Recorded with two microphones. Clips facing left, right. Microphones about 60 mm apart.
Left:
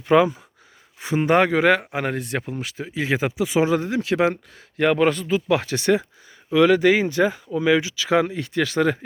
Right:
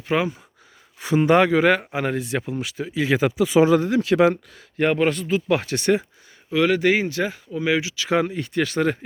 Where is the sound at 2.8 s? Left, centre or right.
Left.